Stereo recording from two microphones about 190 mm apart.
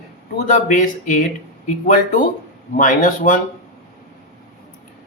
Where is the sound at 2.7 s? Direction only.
45° left (ahead or behind).